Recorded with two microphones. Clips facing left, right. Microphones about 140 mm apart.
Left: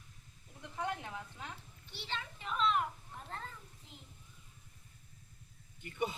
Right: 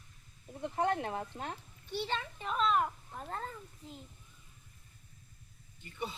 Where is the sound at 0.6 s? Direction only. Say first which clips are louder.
Right 8 dB; 50° right (ahead or behind).